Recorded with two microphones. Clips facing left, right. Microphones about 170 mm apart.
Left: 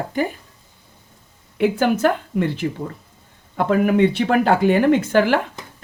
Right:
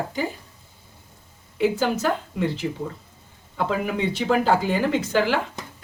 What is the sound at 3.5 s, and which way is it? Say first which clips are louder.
Speech: left 8 dB; 55° left (ahead or behind).